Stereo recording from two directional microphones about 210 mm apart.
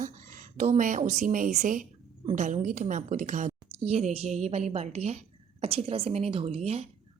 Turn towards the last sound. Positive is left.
turn(degrees=-30)  # may be behind; listen again after turning